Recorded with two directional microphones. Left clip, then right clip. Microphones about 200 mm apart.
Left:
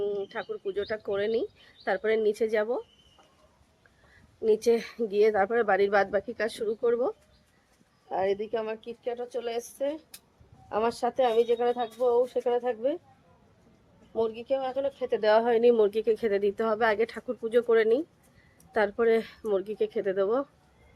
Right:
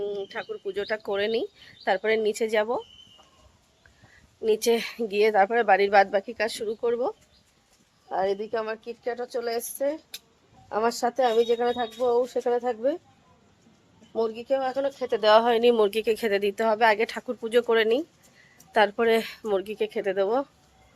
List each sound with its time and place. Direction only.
0.0 s speech: 5° left (ahead or behind)
4.4 s speech: centre (ahead or behind)
8.1 s speech: 5° left (ahead or behind)
8.4 s speech: 20° right (ahead or behind)
14.1 s speech: 30° right (ahead or behind)
15.2 s speech: 5° right (ahead or behind)